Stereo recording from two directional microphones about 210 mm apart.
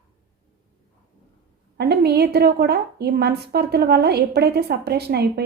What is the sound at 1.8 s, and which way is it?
Speech, 50° right (ahead or behind).